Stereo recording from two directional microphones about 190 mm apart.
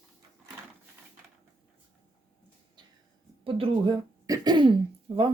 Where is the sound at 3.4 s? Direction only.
30° right (ahead or behind).